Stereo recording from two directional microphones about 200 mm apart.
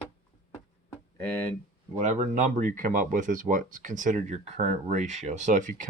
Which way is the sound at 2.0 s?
35° right (ahead or behind).